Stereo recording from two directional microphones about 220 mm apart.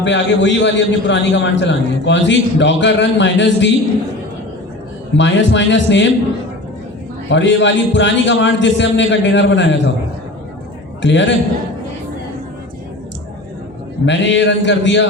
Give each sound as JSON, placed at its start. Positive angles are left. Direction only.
{"t": 0.0, "sound": "a man's voice", "side_deg": 55}
{"t": 5.1, "sound": "a man's voice", "side_deg": 55}
{"t": 7.3, "sound": "a man's voice", "side_deg": 55}
{"t": 11.0, "sound": "a man's voice", "side_deg": 55}
{"t": 14.0, "sound": "a man's voice", "side_deg": 55}